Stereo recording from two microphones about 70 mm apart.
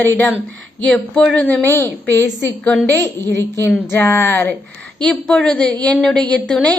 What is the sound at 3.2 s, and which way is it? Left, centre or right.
Speech, right.